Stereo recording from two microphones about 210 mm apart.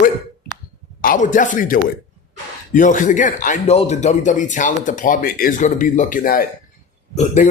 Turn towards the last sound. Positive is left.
turn(degrees=35)  # may be behind; listen again after turning